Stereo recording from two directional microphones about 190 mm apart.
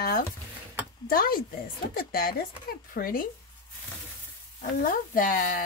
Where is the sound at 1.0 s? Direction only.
50° left (ahead or behind).